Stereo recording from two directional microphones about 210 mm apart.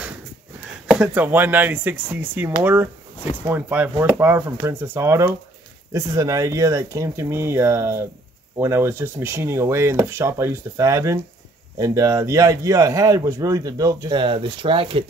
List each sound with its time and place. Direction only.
0.8 s speech: 5° right (ahead or behind); by 15.0 s 25° right (ahead or behind)